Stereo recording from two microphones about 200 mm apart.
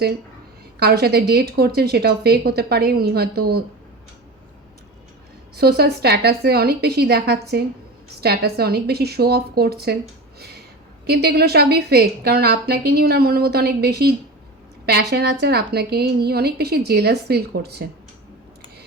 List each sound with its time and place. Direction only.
0.8 s a woman's voice: 55° right (ahead or behind)
5.5 s a woman's voice: 50° right (ahead or behind)
11.0 s a woman's voice: 55° right (ahead or behind)